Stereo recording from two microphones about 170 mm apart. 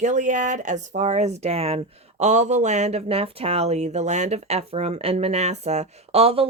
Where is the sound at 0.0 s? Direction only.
45° right (ahead or behind).